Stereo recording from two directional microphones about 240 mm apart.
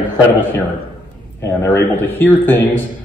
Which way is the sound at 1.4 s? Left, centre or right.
Centre.